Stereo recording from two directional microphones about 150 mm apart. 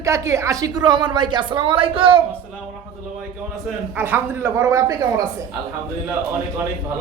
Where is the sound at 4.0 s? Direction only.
15° right (ahead or behind).